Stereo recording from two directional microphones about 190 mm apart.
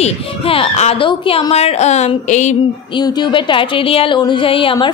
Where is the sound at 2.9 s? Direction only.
20° left (ahead or behind).